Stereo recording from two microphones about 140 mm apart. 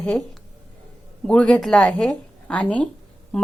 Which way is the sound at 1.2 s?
5° left (ahead or behind).